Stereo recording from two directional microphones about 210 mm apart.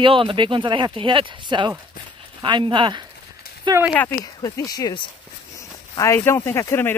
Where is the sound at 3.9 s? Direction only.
5° left (ahead or behind).